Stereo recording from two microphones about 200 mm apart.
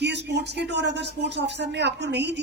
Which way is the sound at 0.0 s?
60° right (ahead or behind).